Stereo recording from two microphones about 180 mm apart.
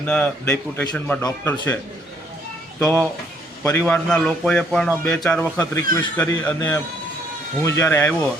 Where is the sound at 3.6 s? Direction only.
10° left (ahead or behind).